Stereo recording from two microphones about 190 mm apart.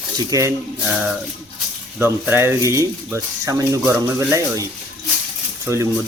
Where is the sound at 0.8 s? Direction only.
5° right (ahead or behind).